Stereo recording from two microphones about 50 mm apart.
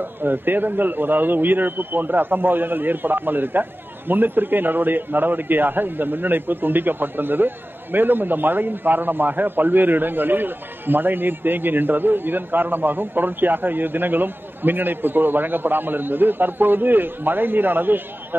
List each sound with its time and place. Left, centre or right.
0.0 s a man's voice: right